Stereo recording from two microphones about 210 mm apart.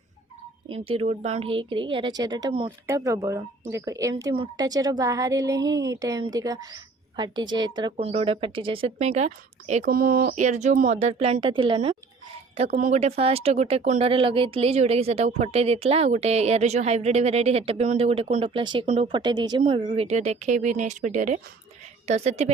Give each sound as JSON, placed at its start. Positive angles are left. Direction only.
{"t": 0.7, "sound": "a woman's voice", "side_deg": -25}
{"t": 5.6, "sound": "speech", "side_deg": -60}
{"t": 6.0, "sound": "a woman's voice", "side_deg": -15}